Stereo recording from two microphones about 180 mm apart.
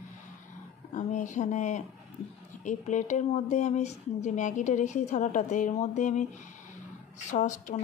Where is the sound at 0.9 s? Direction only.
45° left (ahead or behind).